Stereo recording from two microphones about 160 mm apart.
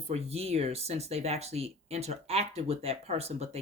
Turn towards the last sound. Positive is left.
turn(degrees=-40)  # may be behind; listen again after turning